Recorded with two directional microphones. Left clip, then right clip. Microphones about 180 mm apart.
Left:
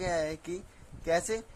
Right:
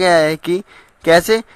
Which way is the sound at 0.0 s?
30° right (ahead or behind).